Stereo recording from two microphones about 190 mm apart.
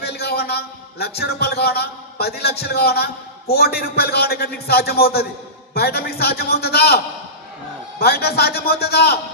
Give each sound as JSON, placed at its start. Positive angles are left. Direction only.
{"t": 0.0, "sound": "a man's voice", "side_deg": 55}